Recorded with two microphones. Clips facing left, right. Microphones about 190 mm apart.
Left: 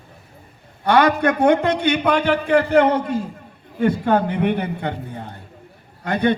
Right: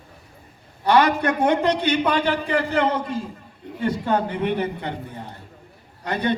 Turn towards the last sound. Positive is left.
turn(degrees=55)  # may be behind; listen again after turning